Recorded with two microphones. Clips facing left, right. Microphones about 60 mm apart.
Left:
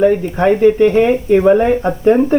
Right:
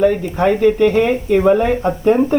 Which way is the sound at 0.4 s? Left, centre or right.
Centre.